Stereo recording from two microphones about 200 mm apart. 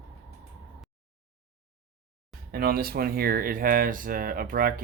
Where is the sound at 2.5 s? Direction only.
50° right (ahead or behind).